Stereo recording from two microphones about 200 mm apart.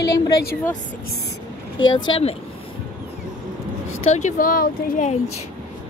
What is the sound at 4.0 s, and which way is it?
Speech, 35° left (ahead or behind).